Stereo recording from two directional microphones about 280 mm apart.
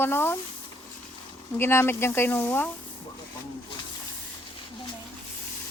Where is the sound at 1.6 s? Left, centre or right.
Centre.